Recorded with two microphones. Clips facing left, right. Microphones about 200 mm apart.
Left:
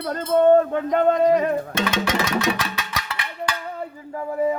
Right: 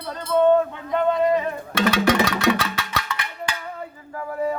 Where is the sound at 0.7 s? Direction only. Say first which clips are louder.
Left 3 dB; 45° left (ahead or behind).